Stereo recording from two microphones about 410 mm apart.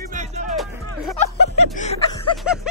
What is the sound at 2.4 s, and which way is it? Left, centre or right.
Music, centre.